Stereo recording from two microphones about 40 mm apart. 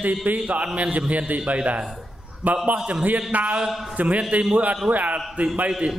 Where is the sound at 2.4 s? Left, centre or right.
Right.